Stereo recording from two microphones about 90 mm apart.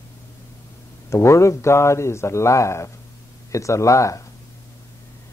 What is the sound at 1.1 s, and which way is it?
Speech, 30° left (ahead or behind).